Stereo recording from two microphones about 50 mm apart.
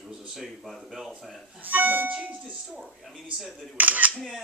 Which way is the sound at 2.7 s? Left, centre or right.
Centre.